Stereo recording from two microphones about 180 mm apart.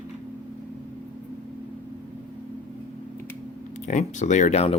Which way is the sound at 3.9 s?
40° left (ahead or behind).